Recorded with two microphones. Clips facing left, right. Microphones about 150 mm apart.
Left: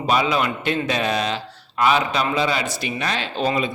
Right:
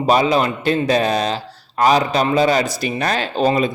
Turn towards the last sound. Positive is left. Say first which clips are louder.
# right 5 dB
turn(degrees=-40)  # may be behind; listen again after turning